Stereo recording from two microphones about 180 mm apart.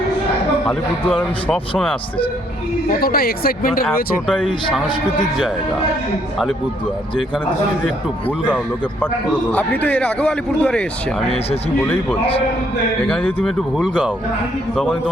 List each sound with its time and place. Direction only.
3.0 s speech: 55° left (ahead or behind)
8.4 s a man's voice: 10° left (ahead or behind)
13.1 s a man's voice: 5° left (ahead or behind)